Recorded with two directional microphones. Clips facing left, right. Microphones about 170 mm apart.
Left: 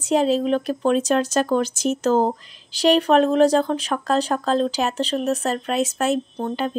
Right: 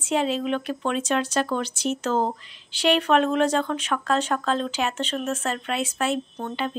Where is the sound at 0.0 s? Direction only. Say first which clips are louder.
Left 5 dB; 40° left (ahead or behind).